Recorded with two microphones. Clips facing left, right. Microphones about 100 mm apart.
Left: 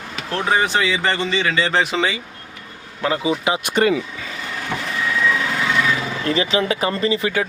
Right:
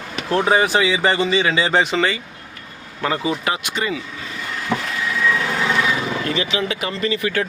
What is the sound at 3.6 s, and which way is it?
Speech, 55° left (ahead or behind).